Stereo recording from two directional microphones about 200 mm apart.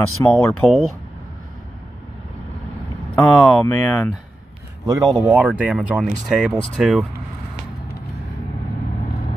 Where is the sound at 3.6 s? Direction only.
5° left (ahead or behind).